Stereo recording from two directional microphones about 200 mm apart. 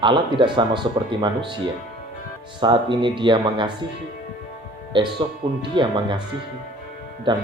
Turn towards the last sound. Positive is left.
turn(degrees=-25)  # may be behind; listen again after turning